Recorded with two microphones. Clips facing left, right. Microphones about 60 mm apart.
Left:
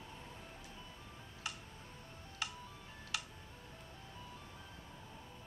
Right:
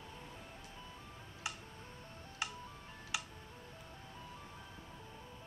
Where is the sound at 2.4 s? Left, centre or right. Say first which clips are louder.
Right 1 dB; right.